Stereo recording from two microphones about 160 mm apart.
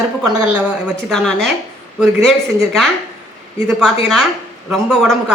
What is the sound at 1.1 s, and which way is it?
Speech, 5° left (ahead or behind).